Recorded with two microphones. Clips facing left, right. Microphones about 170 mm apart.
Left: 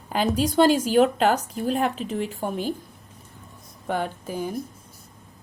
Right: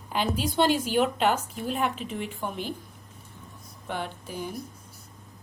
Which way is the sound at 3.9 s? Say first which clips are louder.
Left 6 dB; 45° left (ahead or behind).